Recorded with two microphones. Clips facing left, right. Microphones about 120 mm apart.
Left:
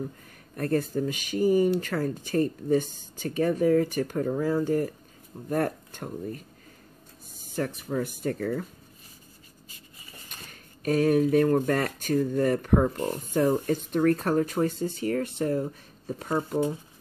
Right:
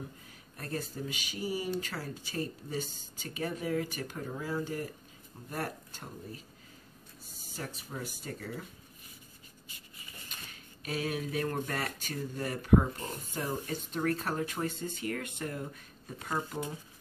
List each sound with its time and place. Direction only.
0.6 s speech: 55° left (ahead or behind)
7.4 s speech: 50° left (ahead or behind)
10.5 s speech: 45° left (ahead or behind)